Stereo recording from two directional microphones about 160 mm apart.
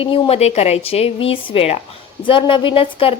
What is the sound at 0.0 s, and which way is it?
A woman's voice, 35° left (ahead or behind).